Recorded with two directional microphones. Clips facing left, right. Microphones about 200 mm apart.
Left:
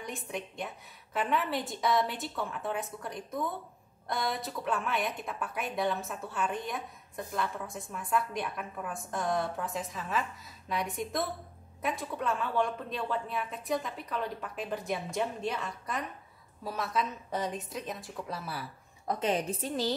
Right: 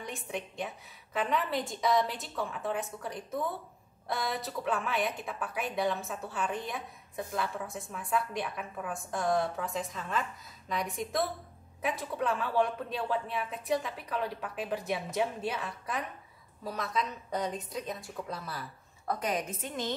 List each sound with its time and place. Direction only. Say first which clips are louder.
0.0 s speech: even; centre (ahead or behind)
19.0 s a woman's voice: left 3 dB; 25° left (ahead or behind)